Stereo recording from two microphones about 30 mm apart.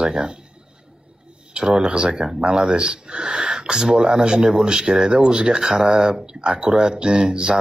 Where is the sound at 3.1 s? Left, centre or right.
Right.